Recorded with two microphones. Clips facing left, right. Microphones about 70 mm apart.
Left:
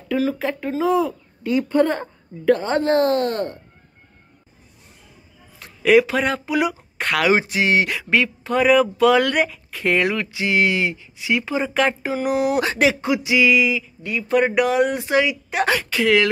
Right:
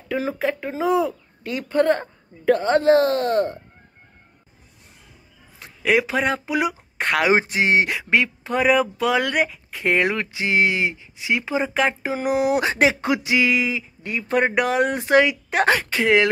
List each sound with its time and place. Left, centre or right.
0.4 s speech: centre
5.6 s speech: centre
12.7 s speech: right